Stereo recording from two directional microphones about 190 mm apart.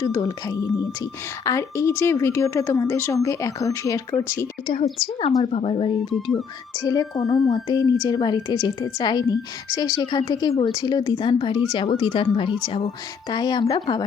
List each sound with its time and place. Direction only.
0.0 s a woman's voice: 20° left (ahead or behind)
4.6 s a woman's voice: 30° left (ahead or behind)
6.7 s a woman's voice: 20° left (ahead or behind)